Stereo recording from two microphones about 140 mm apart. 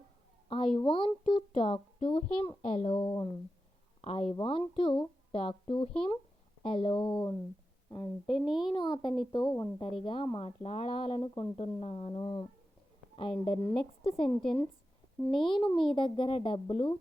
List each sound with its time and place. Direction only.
0.4 s a sound: 40° left (ahead or behind)
0.8 s speech: 40° left (ahead or behind)
8.3 s a child's voice: 5° right (ahead or behind)
8.7 s speech: 35° left (ahead or behind)
12.2 s speech: 30° left (ahead or behind)